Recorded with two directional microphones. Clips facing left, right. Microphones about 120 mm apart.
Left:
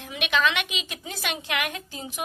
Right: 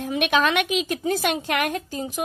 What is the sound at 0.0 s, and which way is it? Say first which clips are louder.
A woman's voice: right 4 dB; 45° right (ahead or behind).